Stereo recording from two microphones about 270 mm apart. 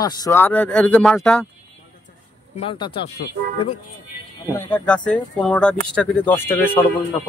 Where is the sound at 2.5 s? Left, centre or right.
Centre.